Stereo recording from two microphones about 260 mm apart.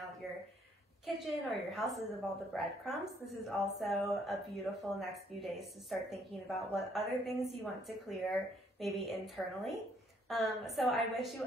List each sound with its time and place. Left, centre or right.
1.0 s speech: centre